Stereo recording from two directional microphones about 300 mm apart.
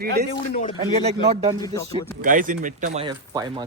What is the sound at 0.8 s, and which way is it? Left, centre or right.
Speech, centre.